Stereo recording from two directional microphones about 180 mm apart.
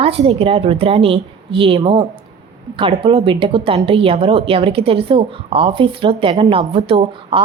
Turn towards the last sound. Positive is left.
turn(degrees=-30)  # may be behind; listen again after turning